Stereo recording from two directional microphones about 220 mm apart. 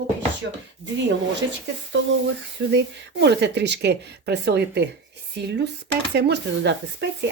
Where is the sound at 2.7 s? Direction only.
50° right (ahead or behind).